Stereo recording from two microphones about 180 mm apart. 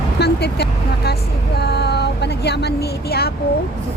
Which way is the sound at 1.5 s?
65° left (ahead or behind).